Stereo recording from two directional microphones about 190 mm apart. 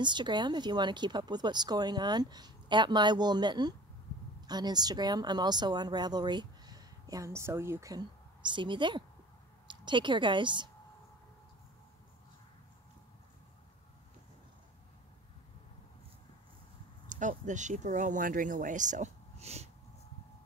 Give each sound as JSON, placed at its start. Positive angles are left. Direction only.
{"t": 0.0, "sound": "speech", "side_deg": -25}
{"t": 17.1, "sound": "speech", "side_deg": -40}